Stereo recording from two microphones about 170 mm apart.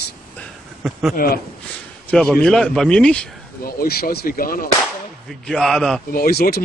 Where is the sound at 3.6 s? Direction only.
60° left (ahead or behind).